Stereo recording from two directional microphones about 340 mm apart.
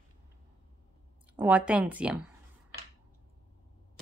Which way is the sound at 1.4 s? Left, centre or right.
Centre.